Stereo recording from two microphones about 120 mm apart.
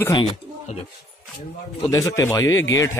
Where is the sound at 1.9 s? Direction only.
25° left (ahead or behind).